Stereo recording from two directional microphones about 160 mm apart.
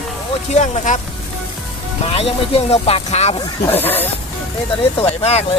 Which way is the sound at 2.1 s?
35° left (ahead or behind).